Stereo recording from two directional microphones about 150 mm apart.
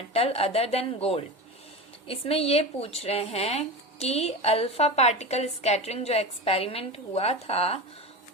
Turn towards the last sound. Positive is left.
turn(degrees=40)  # may be behind; listen again after turning